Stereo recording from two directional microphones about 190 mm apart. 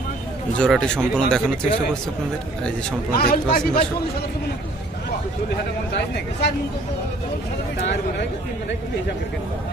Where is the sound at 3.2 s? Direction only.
55° left (ahead or behind).